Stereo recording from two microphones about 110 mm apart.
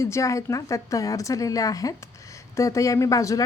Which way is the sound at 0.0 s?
30° left (ahead or behind).